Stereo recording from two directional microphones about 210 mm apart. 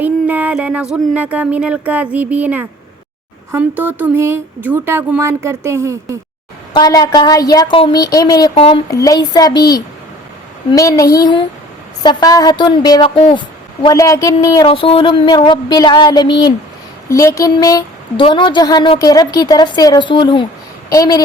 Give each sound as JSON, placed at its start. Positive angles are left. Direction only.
{"t": 0.0, "sound": "speech", "side_deg": -10}
{"t": 6.7, "sound": "a woman's voice", "side_deg": 20}